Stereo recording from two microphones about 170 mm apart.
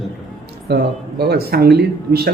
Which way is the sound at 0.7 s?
75° right (ahead or behind).